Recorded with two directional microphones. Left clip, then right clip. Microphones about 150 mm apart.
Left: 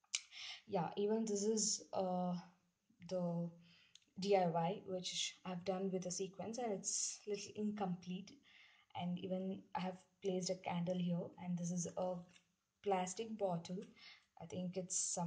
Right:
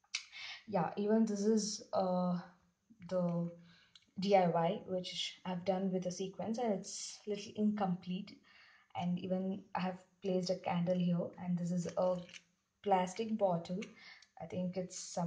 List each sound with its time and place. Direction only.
0.3 s a woman's voice: 35° left (ahead or behind)
4.2 s a woman's voice: 30° left (ahead or behind)